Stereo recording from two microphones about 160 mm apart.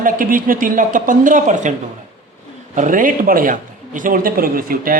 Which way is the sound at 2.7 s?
55° right (ahead or behind).